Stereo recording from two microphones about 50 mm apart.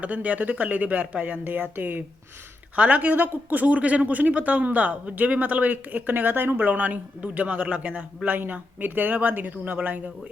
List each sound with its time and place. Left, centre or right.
0.0 s speech: right
2.7 s speech: right